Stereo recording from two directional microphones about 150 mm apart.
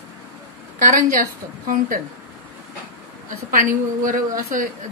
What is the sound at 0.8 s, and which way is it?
A woman's voice, 65° right (ahead or behind).